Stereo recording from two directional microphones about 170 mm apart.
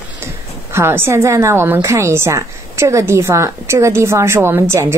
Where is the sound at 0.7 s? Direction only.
15° right (ahead or behind).